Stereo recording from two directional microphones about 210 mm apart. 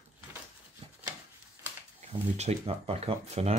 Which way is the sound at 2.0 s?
30° right (ahead or behind).